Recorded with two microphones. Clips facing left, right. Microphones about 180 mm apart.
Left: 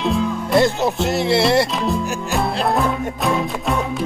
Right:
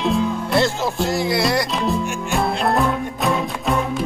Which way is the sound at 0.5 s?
20° left (ahead or behind).